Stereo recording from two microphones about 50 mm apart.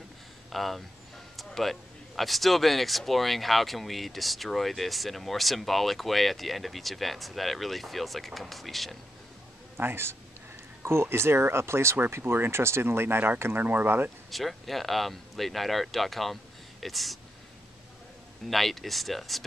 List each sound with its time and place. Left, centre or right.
0.5 s speech: centre
9.8 s speech: right
12.2 s speech: right
14.3 s speech: centre
18.5 s speech: centre